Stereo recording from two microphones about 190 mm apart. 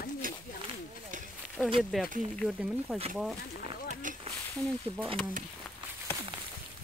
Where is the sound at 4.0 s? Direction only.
45° right (ahead or behind).